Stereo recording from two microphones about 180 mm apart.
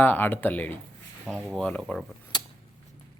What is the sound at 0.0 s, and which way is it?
A man's voice, 10° left (ahead or behind).